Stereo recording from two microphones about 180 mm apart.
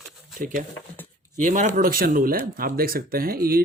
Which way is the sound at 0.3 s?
45° right (ahead or behind).